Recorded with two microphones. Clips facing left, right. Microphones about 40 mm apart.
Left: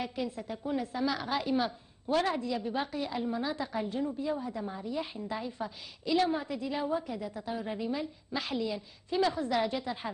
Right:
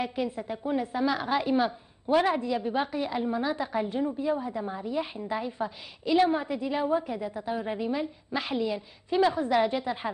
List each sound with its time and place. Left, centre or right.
0.0 s a woman's voice: right